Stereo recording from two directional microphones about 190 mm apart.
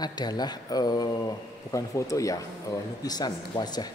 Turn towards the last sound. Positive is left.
turn(degrees=20)  # may be behind; listen again after turning